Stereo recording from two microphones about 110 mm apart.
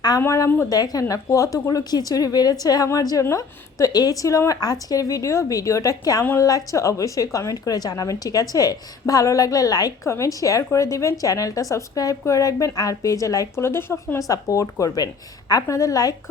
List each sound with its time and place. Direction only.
0.2 s a woman's voice: 25° left (ahead or behind)